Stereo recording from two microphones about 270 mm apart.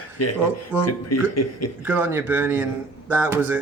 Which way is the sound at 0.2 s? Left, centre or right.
Left.